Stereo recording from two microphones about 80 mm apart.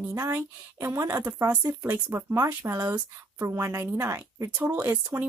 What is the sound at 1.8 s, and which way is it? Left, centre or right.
Speech, right.